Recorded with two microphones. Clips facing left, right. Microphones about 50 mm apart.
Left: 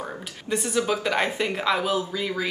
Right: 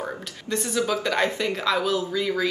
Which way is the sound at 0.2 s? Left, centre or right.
Centre.